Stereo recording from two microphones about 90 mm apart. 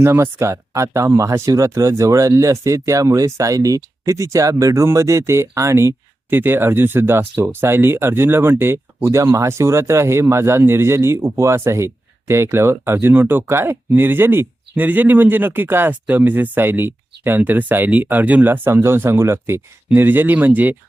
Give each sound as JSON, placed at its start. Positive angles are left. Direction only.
{"t": 0.0, "sound": "speech", "side_deg": -30}